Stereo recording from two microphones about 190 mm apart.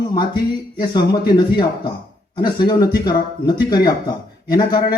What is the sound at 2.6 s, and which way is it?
Speech, 25° left (ahead or behind).